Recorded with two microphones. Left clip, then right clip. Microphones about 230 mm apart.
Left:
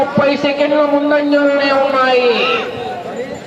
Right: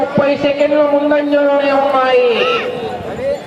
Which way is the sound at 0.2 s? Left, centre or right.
Left.